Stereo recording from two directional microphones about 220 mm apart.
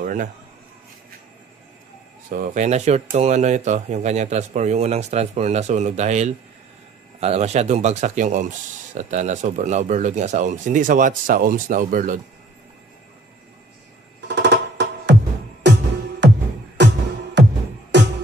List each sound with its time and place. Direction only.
0.0 s a sound: 40° right (ahead or behind)
2.3 s speech: 35° right (ahead or behind)
14.2 s music: 50° right (ahead or behind)
16.2 s music: 50° right (ahead or behind)